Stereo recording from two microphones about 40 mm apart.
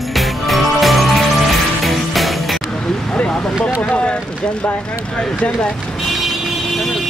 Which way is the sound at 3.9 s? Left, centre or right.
Left.